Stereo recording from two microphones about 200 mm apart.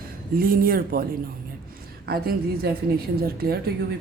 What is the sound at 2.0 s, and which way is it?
Speech, 50° right (ahead or behind).